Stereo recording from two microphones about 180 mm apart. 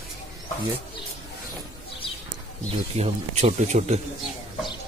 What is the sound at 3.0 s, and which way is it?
Speech, 35° right (ahead or behind).